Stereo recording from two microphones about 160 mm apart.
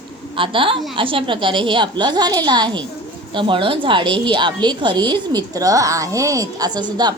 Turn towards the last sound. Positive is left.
turn(degrees=-25)  # may be behind; listen again after turning